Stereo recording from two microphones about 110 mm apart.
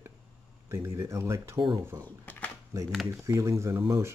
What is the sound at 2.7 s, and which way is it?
Speech, 30° right (ahead or behind).